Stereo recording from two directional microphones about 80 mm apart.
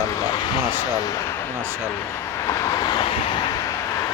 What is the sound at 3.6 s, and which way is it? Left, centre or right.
Vehicle, left.